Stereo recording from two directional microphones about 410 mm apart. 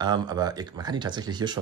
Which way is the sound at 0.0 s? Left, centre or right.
Centre.